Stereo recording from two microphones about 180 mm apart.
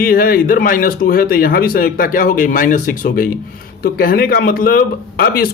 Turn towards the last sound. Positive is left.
turn(degrees=55)  # may be behind; listen again after turning